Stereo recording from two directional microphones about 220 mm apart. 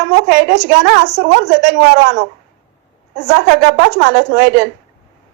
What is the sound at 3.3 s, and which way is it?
A woman's voice, 50° right (ahead or behind).